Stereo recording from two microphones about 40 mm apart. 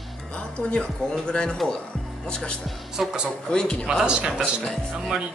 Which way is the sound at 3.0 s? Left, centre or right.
Centre.